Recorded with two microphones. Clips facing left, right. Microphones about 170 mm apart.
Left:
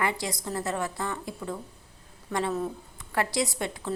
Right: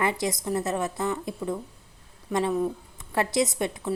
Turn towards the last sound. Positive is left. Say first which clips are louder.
# right 4 dB
turn(degrees=-20)  # may be behind; listen again after turning